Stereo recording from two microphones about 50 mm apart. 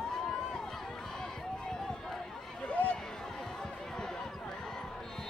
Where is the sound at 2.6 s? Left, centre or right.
Left.